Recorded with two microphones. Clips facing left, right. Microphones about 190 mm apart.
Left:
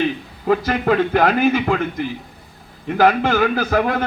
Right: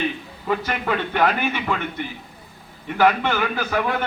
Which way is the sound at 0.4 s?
40° left (ahead or behind).